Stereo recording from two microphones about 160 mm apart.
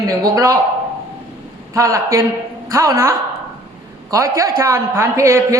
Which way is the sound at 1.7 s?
20° right (ahead or behind).